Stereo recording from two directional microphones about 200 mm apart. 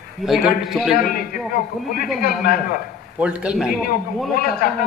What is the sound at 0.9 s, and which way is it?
A man's voice, 45° left (ahead or behind).